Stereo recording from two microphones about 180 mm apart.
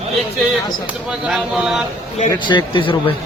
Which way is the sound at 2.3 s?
25° left (ahead or behind).